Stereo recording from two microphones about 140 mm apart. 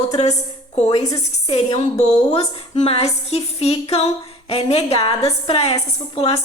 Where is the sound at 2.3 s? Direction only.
45° left (ahead or behind).